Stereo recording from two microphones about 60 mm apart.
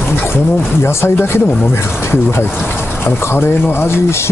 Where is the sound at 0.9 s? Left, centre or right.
Left.